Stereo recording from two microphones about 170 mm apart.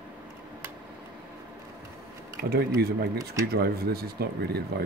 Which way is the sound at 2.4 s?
70° right (ahead or behind).